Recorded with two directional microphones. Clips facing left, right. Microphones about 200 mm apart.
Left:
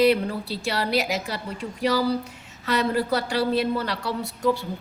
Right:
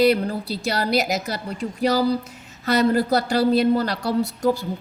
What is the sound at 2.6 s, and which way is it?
A woman's voice, 40° right (ahead or behind).